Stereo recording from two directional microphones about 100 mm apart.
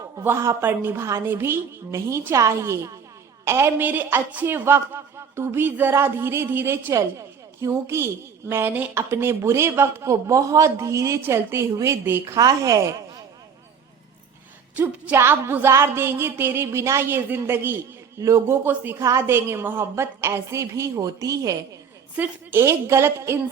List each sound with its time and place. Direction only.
0.2 s a woman's voice: 30° right (ahead or behind)
12.2 s a woman's voice: 35° right (ahead or behind)
15.1 s a woman's voice: 25° right (ahead or behind)
22.1 s a woman's voice: 20° right (ahead or behind)